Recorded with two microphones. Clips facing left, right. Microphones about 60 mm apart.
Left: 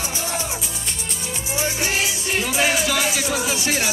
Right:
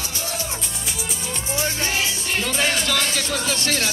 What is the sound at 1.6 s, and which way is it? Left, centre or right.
Music, centre.